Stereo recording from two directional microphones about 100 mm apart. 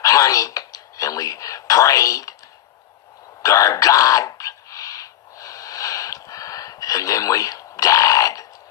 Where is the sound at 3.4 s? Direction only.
35° left (ahead or behind).